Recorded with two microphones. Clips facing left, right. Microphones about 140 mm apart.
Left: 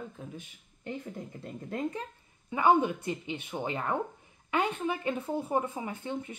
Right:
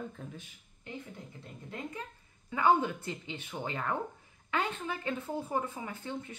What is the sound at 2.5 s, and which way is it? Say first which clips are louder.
Speech: left 3 dB; 20° left (ahead or behind).